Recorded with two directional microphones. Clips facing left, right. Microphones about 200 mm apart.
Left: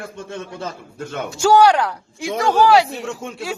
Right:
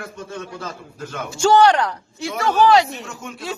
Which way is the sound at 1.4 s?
10° left (ahead or behind).